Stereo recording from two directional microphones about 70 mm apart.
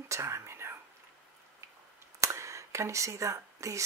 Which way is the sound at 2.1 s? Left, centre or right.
Right.